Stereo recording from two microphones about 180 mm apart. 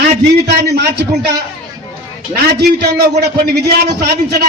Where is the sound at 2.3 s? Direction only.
60° right (ahead or behind).